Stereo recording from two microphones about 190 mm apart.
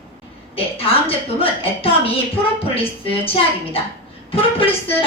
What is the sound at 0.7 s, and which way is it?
A woman's voice, 30° left (ahead or behind).